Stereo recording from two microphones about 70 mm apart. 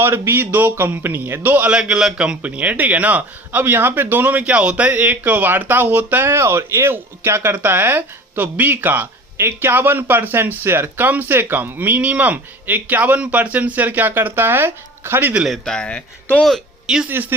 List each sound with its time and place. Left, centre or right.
0.0 s speech: right
15.4 s speech: centre
17.1 s speech: right